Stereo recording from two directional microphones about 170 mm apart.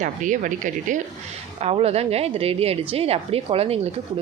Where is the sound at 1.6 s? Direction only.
35° right (ahead or behind).